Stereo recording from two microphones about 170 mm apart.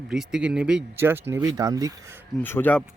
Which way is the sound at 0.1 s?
5° right (ahead or behind).